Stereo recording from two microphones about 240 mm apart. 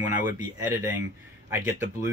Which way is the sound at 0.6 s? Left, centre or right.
Centre.